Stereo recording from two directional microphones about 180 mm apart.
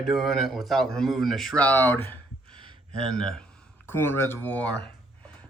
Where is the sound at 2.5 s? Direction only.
25° right (ahead or behind).